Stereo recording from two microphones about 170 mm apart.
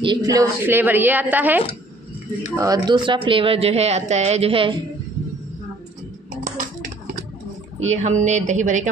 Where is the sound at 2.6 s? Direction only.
25° right (ahead or behind).